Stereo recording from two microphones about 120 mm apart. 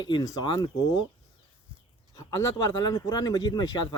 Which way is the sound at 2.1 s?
30° left (ahead or behind).